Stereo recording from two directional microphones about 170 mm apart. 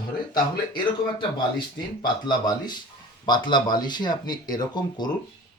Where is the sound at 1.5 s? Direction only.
25° left (ahead or behind).